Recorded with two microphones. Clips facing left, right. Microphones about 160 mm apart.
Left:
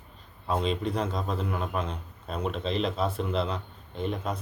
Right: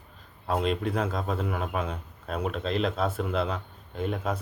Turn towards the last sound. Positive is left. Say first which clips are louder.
# right 1 dB
turn(degrees=-5)  # may be behind; listen again after turning